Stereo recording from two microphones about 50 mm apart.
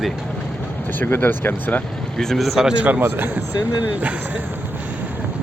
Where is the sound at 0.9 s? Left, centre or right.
Left.